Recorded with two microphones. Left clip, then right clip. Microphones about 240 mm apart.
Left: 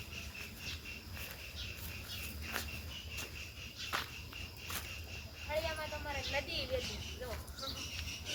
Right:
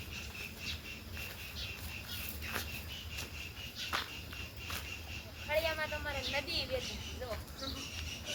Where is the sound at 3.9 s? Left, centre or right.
Centre.